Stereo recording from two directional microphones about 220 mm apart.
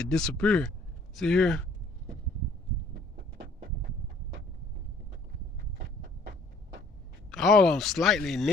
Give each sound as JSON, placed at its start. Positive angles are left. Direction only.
{"t": 0.0, "sound": "speech", "side_deg": 5}
{"t": 5.8, "sound": "a sound", "side_deg": -50}
{"t": 7.2, "sound": "speech", "side_deg": 0}